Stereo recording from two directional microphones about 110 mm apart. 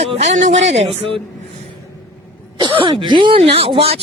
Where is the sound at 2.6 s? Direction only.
45° right (ahead or behind).